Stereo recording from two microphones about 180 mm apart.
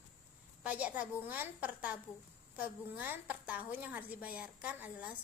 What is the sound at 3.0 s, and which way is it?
A woman's voice, 10° right (ahead or behind).